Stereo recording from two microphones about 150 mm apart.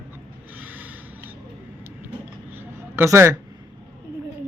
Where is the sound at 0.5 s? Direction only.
10° right (ahead or behind).